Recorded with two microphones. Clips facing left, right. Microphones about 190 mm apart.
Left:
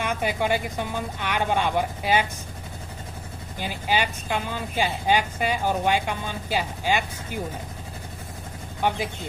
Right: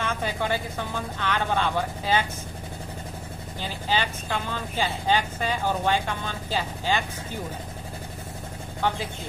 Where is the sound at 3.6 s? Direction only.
10° left (ahead or behind).